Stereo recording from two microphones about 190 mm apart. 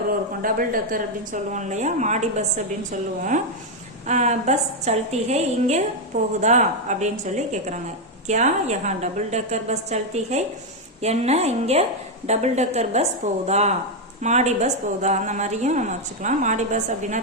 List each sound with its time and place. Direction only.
0.4 s a woman's voice: 45° right (ahead or behind)
4.0 s a woman's voice: 40° right (ahead or behind)